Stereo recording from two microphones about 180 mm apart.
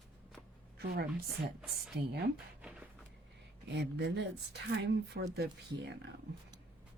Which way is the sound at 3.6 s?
75° right (ahead or behind).